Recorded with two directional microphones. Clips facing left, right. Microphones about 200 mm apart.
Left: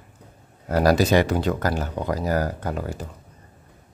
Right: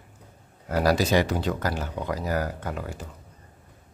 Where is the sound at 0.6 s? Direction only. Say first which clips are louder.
Left 4 dB; 45° left (ahead or behind).